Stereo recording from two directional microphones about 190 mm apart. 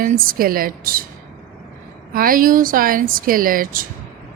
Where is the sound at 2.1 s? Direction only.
50° right (ahead or behind).